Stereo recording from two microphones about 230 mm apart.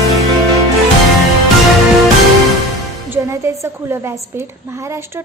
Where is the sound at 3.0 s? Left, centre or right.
Centre.